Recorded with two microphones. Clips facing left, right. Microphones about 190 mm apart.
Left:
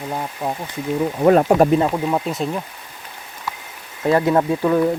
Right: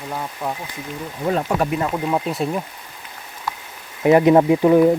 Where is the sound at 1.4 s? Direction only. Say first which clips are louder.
Left 7 dB; 40° left (ahead or behind).